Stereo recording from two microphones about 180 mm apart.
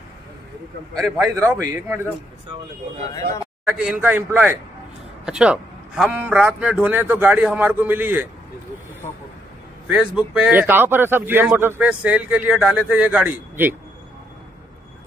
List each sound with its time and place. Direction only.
0.9 s a man's voice: centre (ahead or behind)
1.2 s a man's voice: 20° right (ahead or behind)
3.6 s a man's voice: 5° right (ahead or behind)
9.8 s a man's voice: 5° right (ahead or behind)